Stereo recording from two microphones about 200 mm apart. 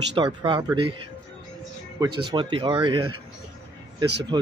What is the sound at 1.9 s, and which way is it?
Speech, 20° right (ahead or behind).